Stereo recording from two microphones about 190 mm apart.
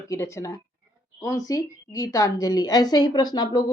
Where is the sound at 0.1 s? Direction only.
15° left (ahead or behind).